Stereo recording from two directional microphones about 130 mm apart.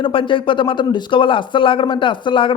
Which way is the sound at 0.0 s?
40° left (ahead or behind).